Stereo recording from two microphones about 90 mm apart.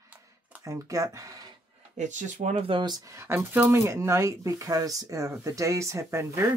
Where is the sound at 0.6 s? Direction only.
35° right (ahead or behind).